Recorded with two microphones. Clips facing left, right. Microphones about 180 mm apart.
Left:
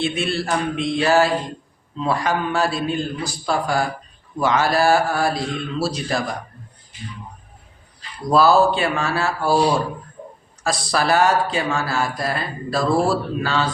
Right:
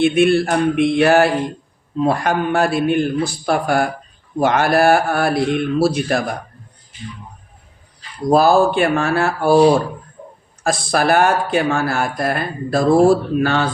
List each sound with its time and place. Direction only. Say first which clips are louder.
0.0 s speech: right 9 dB; 55° right (ahead or behind)
8.3 s speech: right 2 dB; 50° right (ahead or behind)